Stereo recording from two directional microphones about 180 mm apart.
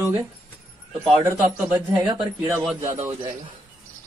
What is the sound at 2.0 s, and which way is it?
Speech, 25° right (ahead or behind).